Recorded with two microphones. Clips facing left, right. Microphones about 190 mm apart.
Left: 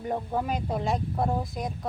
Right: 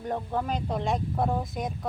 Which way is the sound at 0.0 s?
10° left (ahead or behind).